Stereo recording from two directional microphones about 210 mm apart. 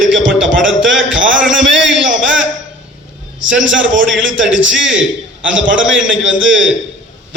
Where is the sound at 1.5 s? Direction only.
60° right (ahead or behind).